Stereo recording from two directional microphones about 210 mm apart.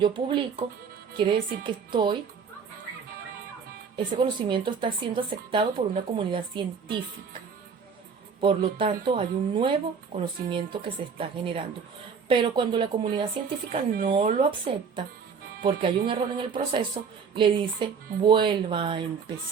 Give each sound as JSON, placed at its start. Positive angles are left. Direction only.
{"t": 0.0, "sound": "speech", "side_deg": -25}
{"t": 3.9, "sound": "speech", "side_deg": -25}
{"t": 8.4, "sound": "speech", "side_deg": -25}